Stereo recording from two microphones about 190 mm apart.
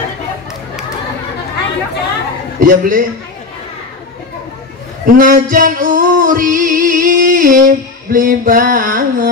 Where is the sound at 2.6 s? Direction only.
45° right (ahead or behind).